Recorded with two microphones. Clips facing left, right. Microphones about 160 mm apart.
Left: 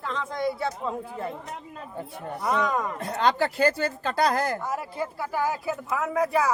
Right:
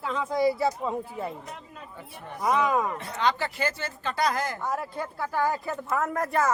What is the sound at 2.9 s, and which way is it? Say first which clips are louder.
Speech: left 3 dB; 45° left (ahead or behind).